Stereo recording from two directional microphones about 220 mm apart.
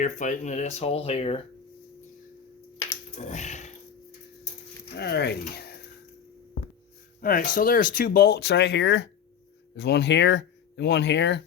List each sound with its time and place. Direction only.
0.0 s speech: 35° left (ahead or behind)
3.2 s speech: 30° left (ahead or behind)
4.9 s speech: 45° left (ahead or behind)
7.2 s speech: 40° left (ahead or behind)